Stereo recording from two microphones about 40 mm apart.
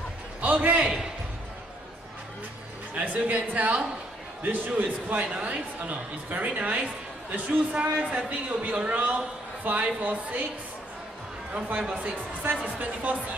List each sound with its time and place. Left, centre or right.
0.4 s a man's voice: right
2.9 s speech: right
11.9 s speech: right